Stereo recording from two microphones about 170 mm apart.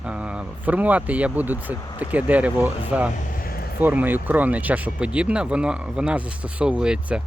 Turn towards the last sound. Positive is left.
turn(degrees=-5)  # may be behind; listen again after turning